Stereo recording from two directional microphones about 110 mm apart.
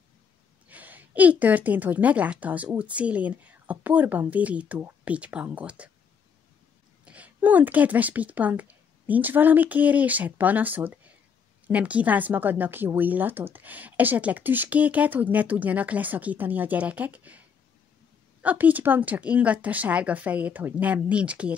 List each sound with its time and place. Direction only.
0.7 s speech: 15° right (ahead or behind)
7.1 s speech: 15° right (ahead or behind)
18.4 s speech: 15° right (ahead or behind)